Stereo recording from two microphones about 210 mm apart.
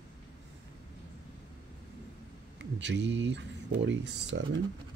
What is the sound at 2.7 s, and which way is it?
Speech, 55° right (ahead or behind).